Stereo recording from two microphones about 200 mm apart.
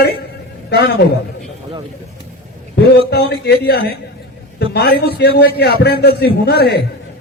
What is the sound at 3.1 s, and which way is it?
A man's voice, 55° left (ahead or behind).